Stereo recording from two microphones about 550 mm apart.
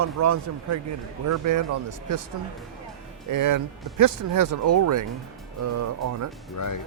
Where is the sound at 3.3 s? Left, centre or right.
Right.